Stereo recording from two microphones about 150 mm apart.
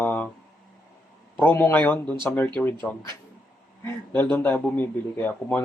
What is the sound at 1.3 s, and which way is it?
Speech, 15° left (ahead or behind).